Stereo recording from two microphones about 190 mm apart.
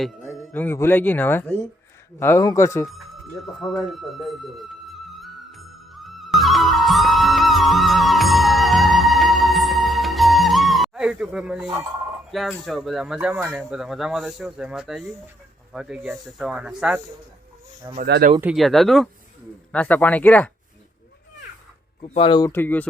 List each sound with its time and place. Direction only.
0.3 s speech: 10° left (ahead or behind)
3.4 s music: centre (ahead or behind)
12.3 s speech: centre (ahead or behind)
18.0 s speech: 55° right (ahead or behind)
18.3 s speech: 5° right (ahead or behind)
22.0 s speech: 30° left (ahead or behind); by 22.9 s 10° left (ahead or behind)